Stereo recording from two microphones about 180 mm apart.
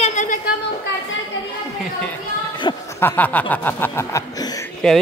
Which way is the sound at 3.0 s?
10° left (ahead or behind).